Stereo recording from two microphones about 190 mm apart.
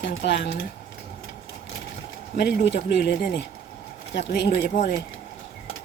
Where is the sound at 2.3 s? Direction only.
60° left (ahead or behind).